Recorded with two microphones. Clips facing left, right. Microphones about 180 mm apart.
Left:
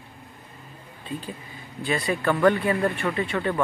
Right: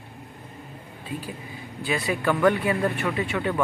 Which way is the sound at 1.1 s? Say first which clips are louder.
Even; 10° right (ahead or behind).